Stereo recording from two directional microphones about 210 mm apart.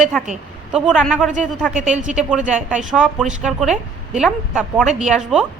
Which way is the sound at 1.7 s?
35° right (ahead or behind).